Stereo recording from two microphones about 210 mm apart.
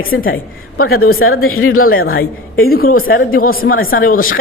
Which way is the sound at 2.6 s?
45° left (ahead or behind).